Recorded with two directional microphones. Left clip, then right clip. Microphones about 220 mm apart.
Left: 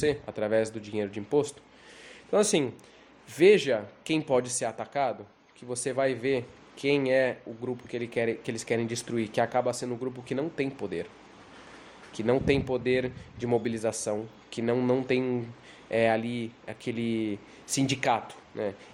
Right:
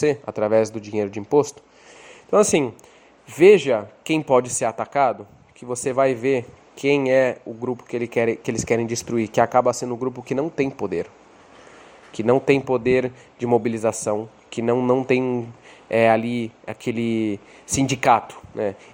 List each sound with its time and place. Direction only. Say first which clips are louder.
0.0 s speech: right 7 dB; 25° right (ahead or behind)
2.0 s a sound: right 8 dB; 25° right (ahead or behind)
3.2 s speech: right 7 dB; 20° right (ahead or behind)
12.1 s speech: right 8 dB; 25° right (ahead or behind)